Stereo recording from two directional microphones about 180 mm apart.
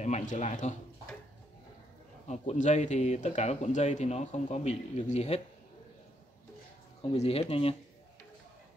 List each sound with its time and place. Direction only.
0.0 s speech: 40° left (ahead or behind)
2.2 s speech: 40° left (ahead or behind)
7.0 s speech: 35° left (ahead or behind)